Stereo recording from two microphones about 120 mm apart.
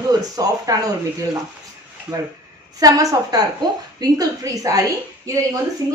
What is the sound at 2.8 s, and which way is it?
Speech, 30° right (ahead or behind).